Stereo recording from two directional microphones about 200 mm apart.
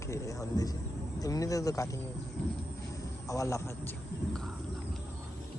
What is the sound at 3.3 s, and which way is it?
Speech, 15° left (ahead or behind).